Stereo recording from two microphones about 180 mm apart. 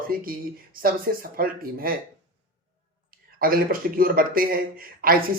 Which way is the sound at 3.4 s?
55° right (ahead or behind).